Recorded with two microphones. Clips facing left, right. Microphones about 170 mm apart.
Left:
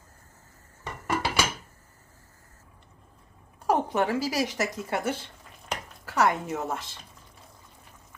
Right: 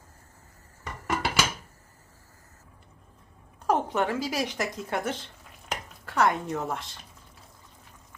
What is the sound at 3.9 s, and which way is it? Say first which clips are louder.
A woman's voice: left 2 dB; 5° left (ahead or behind).